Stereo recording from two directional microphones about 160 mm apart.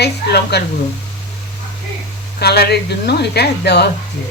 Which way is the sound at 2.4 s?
85° left.